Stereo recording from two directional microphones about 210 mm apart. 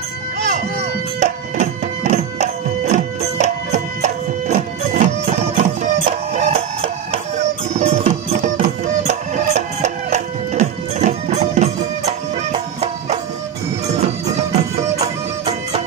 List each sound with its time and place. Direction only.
1.2 s music: 35° right (ahead or behind)
6.3 s printer: 30° right (ahead or behind)
7.7 s music: 35° right (ahead or behind)